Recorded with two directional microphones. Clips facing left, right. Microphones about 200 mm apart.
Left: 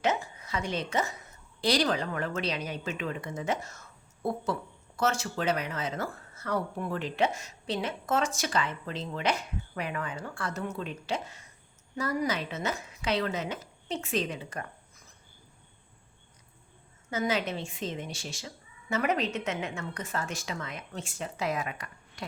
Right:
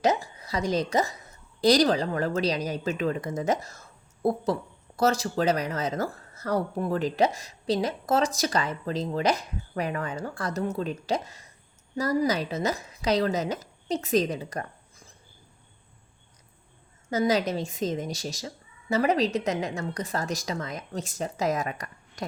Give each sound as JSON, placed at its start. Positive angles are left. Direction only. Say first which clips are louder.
{"t": 0.0, "sound": "a sound", "louder": "right 4 dB", "side_deg": -35}
{"t": 1.6, "sound": "a woman's voice", "louder": "right 6 dB", "side_deg": -40}
{"t": 17.1, "sound": "speech", "louder": "right 5 dB", "side_deg": -40}